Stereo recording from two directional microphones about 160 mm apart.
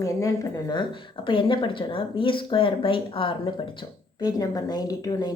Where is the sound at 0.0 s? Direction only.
20° left (ahead or behind).